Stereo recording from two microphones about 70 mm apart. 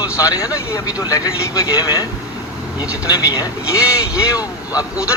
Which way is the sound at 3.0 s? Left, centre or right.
Left.